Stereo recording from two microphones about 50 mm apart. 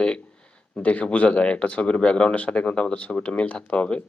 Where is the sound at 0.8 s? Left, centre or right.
Left.